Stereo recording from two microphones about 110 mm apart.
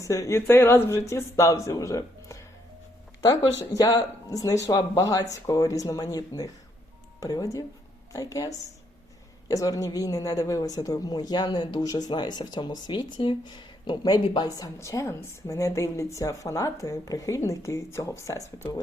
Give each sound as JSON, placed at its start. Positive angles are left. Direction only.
{"t": 0.1, "sound": "a woman's voice", "side_deg": 25}